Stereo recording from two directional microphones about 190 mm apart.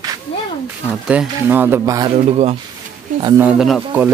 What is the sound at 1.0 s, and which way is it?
Speech, 10° right (ahead or behind).